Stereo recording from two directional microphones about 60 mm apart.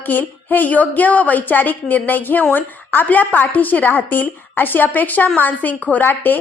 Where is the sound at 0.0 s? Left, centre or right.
Left.